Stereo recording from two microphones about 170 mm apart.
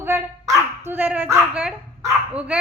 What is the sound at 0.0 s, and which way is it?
Dog, 15° right (ahead or behind).